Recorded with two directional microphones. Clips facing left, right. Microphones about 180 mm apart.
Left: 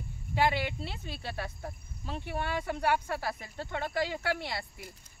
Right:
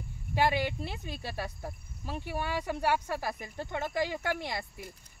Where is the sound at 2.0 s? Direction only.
10° right (ahead or behind).